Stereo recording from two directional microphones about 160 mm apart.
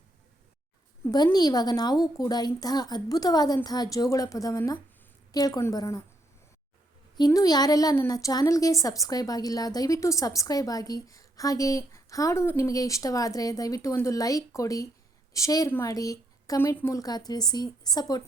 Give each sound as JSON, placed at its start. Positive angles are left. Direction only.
{"t": 1.1, "sound": "a woman's voice", "side_deg": 25}
{"t": 7.2, "sound": "a woman's voice", "side_deg": 20}